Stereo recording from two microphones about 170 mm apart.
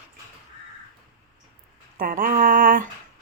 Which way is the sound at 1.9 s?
55° right (ahead or behind).